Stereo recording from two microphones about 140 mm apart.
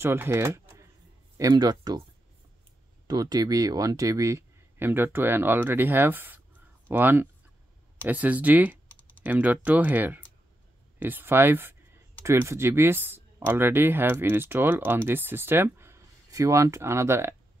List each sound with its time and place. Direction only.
0.0 s speech: 15° right (ahead or behind)
1.4 s speech: 30° right (ahead or behind)
3.1 s speech: 30° right (ahead or behind)